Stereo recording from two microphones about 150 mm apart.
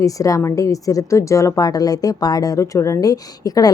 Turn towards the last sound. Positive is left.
turn(degrees=25)  # may be behind; listen again after turning